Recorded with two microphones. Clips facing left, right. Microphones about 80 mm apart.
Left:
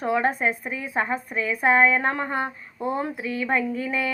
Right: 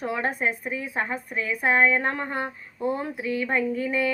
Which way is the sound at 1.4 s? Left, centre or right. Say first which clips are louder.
Left 2 dB; centre.